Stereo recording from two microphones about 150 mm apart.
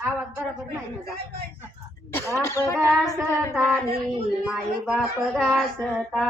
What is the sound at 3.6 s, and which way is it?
Child singing, 5° left (ahead or behind).